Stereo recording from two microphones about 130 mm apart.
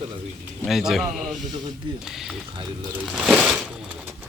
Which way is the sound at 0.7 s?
Centre (ahead or behind).